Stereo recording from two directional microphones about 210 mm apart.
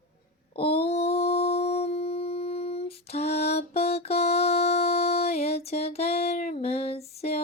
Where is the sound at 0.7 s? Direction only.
30° left (ahead or behind).